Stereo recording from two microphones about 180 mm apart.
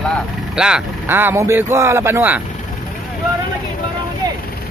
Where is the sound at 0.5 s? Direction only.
5° right (ahead or behind).